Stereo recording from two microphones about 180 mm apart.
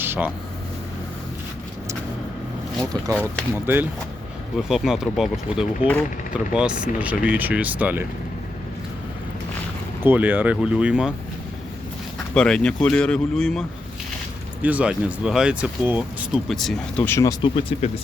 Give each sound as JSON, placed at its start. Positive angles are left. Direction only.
{"t": 0.0, "sound": "a sound", "side_deg": -10}
{"t": 3.5, "sound": "speech", "side_deg": -10}
{"t": 10.0, "sound": "speech", "side_deg": -10}
{"t": 12.3, "sound": "speech", "side_deg": 5}
{"t": 17.1, "sound": "speech", "side_deg": 15}
{"t": 17.4, "sound": "speech", "side_deg": 30}